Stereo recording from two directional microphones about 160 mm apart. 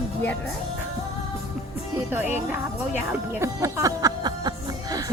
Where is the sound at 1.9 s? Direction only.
15° right (ahead or behind).